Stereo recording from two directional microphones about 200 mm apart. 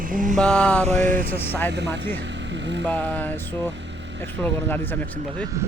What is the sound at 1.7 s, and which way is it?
Speech, 60° right (ahead or behind).